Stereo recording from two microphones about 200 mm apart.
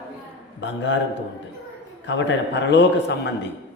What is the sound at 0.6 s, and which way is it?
Speech, 65° left (ahead or behind).